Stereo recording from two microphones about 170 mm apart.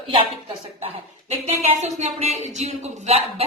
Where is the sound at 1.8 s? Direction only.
40° right (ahead or behind).